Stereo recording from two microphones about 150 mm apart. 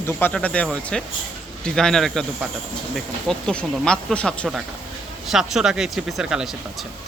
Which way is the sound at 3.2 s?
5° left (ahead or behind).